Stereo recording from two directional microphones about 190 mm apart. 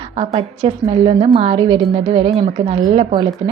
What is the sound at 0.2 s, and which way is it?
A woman's voice, 30° right (ahead or behind).